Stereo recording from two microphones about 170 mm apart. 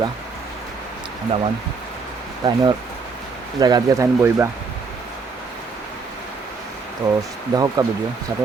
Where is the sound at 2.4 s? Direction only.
25° right (ahead or behind).